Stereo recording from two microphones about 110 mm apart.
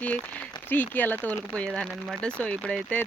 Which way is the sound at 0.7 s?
15° left (ahead or behind).